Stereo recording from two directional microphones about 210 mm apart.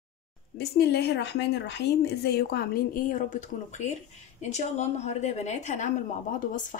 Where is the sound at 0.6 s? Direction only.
50° left (ahead or behind).